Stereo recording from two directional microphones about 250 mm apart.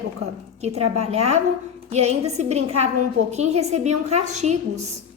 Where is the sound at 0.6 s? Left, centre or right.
Right.